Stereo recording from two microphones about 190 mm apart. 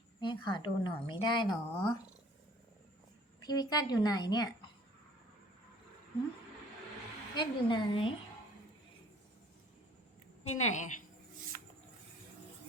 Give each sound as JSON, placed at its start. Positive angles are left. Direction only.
{"t": 0.2, "sound": "a woman's voice", "side_deg": 25}
{"t": 3.4, "sound": "a woman's voice", "side_deg": 20}
{"t": 7.3, "sound": "a woman's voice", "side_deg": 25}
{"t": 10.4, "sound": "a woman's voice", "side_deg": 35}